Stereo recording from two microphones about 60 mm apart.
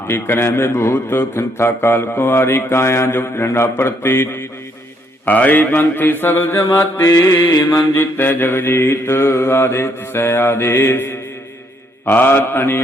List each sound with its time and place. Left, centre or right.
0.1 s a man's voice: left
5.2 s mantra: left
6.7 s a man's voice: left
7.6 s mantra: left
7.9 s mantra: left